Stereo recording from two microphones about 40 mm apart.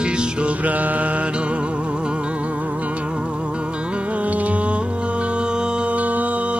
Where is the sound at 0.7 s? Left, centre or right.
Right.